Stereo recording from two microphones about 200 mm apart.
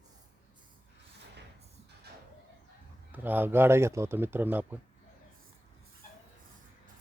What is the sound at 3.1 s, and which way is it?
Speech, 10° right (ahead or behind).